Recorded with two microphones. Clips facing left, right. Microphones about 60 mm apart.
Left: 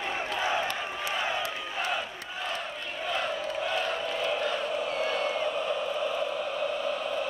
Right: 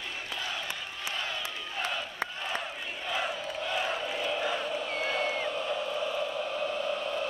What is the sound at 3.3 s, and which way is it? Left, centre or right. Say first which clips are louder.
Crowd: left 3 dB; centre.